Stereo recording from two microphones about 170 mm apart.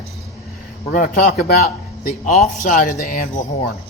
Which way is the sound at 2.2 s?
40° left (ahead or behind).